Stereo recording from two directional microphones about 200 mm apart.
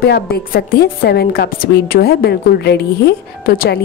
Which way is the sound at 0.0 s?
50° left (ahead or behind).